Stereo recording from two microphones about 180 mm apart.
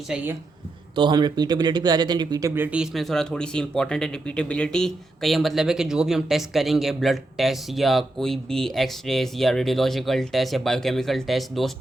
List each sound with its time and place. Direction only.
0.1 s speech: 5° right (ahead or behind)
0.9 s speech: 25° right (ahead or behind)
2.6 s speech: 5° right (ahead or behind)